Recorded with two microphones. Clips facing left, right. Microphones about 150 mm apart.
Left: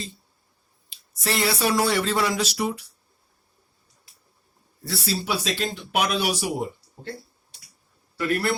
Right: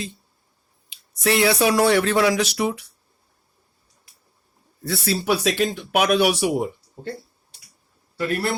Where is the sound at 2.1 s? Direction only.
90° right.